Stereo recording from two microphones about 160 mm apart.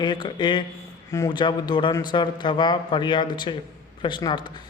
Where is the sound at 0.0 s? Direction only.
30° left (ahead or behind).